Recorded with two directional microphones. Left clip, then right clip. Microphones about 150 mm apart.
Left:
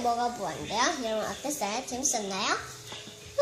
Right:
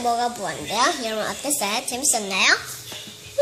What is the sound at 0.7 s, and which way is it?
Speech, 45° right (ahead or behind).